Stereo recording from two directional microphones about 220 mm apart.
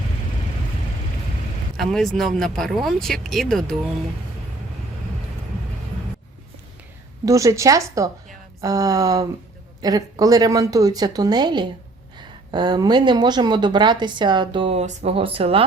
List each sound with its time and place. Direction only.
1.7 s speech: centre (ahead or behind)
7.3 s a woman's voice: 15° right (ahead or behind)